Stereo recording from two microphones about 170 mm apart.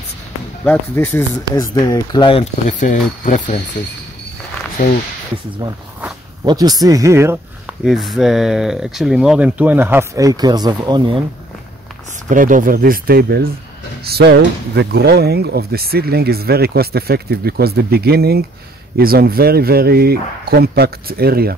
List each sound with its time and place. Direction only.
0.7 s speech: 10° left (ahead or behind); by 2.5 s 30° left (ahead or behind)
2.8 s speech: 50° left (ahead or behind)
6.4 s speech: 20° right (ahead or behind)
7.8 s speech: centre (ahead or behind); by 11.2 s 30° right (ahead or behind)
12.3 s speech: 50° right (ahead or behind)